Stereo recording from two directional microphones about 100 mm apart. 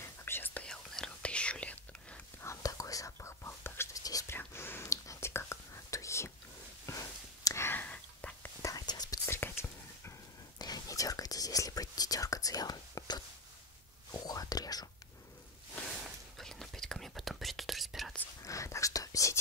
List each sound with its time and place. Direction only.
0.2 s whispering: 20° left (ahead or behind)
0.7 s whispering: 5° left (ahead or behind)
2.4 s whispering: 30° left (ahead or behind)
4.0 s whispering: 35° left (ahead or behind)
4.3 s whispering: 25° left (ahead or behind)
8.6 s whispering: 40° left (ahead or behind)
9.2 s whispering: 25° left (ahead or behind)
10.6 s whispering: 40° left (ahead or behind)
16.3 s whispering: 5° left (ahead or behind)
18.4 s whispering: 35° left (ahead or behind)